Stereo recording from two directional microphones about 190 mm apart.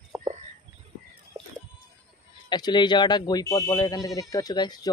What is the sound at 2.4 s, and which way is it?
Speech, 20° left (ahead or behind).